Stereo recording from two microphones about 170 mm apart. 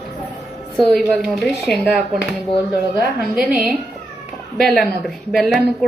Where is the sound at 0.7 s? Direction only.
5° left (ahead or behind).